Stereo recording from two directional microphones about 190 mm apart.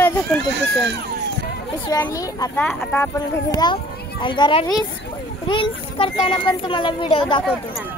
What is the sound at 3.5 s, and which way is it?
A child's voice, 25° left (ahead or behind).